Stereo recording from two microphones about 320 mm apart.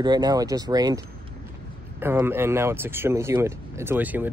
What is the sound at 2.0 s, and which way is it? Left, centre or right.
Speech, centre.